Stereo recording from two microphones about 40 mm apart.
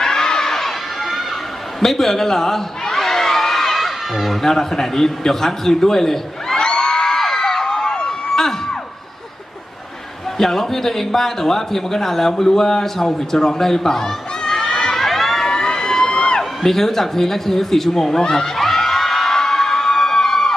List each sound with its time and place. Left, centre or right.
0.0 s crowd: centre
1.8 s a sound: centre
4.4 s a man's voice: centre
6.6 s a sound: centre
10.3 s a man's voice: centre
15.5 s emergency vehicle: centre
16.1 s music: left
16.4 s a man's voice: centre
18.5 s crowd: centre